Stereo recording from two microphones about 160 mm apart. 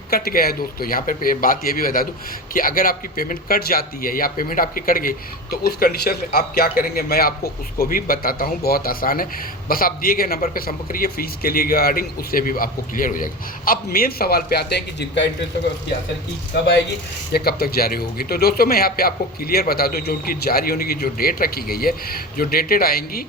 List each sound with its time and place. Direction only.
0.1 s a man's voice: 70° left (ahead or behind); by 15.3 s 90° left
17.3 s a man's voice: 75° left (ahead or behind)